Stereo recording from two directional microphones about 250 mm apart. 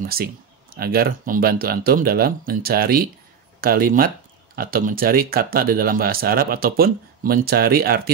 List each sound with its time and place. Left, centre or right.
0.0 s speech: right